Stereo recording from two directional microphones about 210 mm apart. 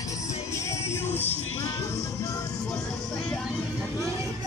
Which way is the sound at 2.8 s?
5° left (ahead or behind).